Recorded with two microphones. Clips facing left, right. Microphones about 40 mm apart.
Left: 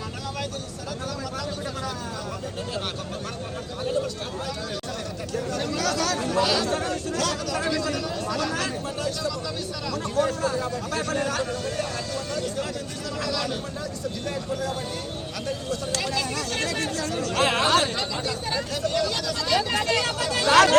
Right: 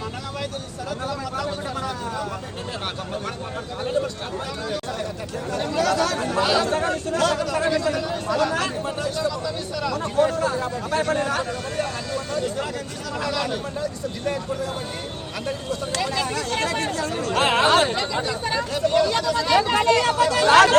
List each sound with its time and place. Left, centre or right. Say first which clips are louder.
5.5 s a sound: right 6 dB; right
9.8 s a man's voice: right 4 dB; right
16.0 s speech: right 3 dB; right
17.9 s speech: right 4 dB; centre
20.0 s speech: right 6 dB; right